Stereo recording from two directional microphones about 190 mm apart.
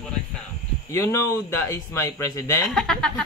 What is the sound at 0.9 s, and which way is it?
Speech, 15° left (ahead or behind).